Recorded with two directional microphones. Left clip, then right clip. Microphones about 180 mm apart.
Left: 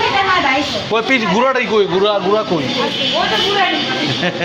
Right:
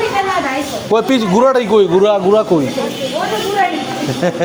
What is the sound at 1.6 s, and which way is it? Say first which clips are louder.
Speech: right 3 dB; 55° right (ahead or behind).